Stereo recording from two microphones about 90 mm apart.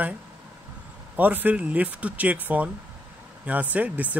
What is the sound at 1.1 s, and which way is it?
Speech, 20° right (ahead or behind).